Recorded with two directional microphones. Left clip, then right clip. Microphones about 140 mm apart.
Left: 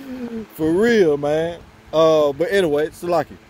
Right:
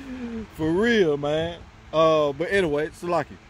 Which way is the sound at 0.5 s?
10° right (ahead or behind).